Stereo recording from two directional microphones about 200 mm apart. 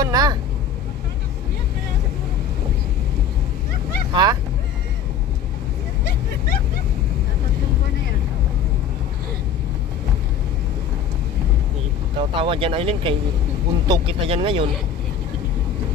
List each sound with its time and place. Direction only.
0.0 s vehicle: 20° right (ahead or behind)
4.1 s speech: 20° right (ahead or behind)
12.2 s speech: 25° right (ahead or behind)